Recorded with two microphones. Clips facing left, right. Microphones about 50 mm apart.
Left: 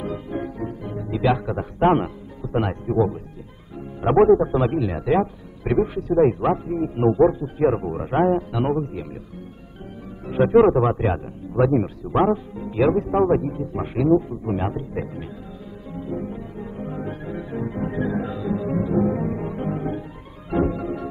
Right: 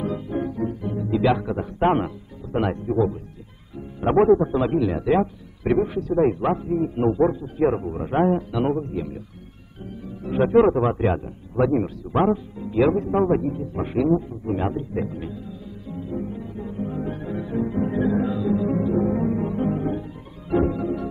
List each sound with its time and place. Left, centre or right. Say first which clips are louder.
0.0 s music: right 2 dB; centre
1.1 s a man's voice: even; centre
8.1 s a man's voice: left 1 dB; centre
10.2 s a man's voice: left 2 dB; centre
15.9 s music: left 1 dB; centre